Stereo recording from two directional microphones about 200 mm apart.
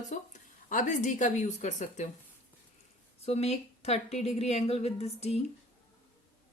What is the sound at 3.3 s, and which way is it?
Speech, 30° left (ahead or behind).